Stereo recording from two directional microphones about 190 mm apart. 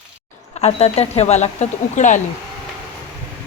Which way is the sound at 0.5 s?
30° left (ahead or behind).